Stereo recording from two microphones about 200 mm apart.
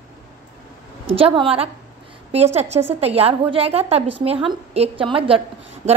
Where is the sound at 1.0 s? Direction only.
30° right (ahead or behind).